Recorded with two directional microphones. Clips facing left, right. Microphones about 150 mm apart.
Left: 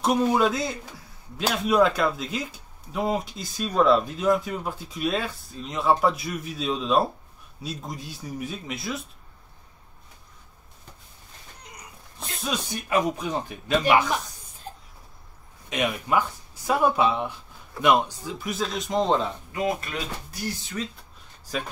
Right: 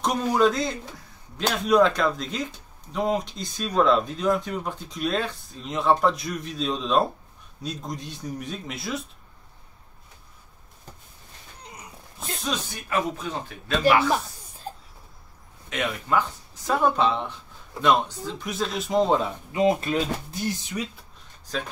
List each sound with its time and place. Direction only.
0.0 s a man's voice: 5° left (ahead or behind)
12.9 s speech: 15° left (ahead or behind)
15.7 s a man's voice: 15° left (ahead or behind); by 19.3 s 10° right (ahead or behind)
19.5 s speech: 25° right (ahead or behind)